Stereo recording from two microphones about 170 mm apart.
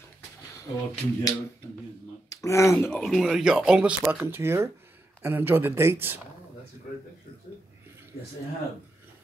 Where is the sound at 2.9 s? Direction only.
Centre (ahead or behind); by 6.2 s 15° right (ahead or behind).